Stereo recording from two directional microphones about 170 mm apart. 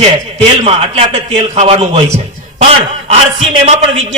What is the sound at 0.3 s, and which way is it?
A man's voice, 35° right (ahead or behind).